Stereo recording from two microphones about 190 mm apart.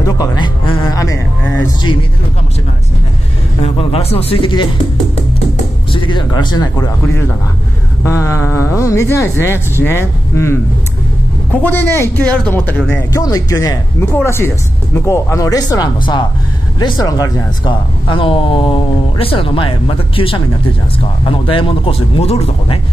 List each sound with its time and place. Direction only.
0.0 s music: 20° left (ahead or behind)
1.8 s speech: 25° left (ahead or behind)
3.6 s speech: 30° left (ahead or behind)
5.9 s a man's voice: 25° left (ahead or behind)